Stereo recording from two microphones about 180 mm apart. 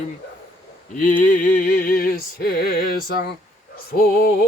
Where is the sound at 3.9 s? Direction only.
55° left (ahead or behind).